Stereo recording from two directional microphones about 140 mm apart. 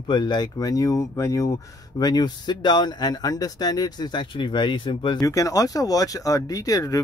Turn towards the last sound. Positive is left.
turn(degrees=25)  # may be behind; listen again after turning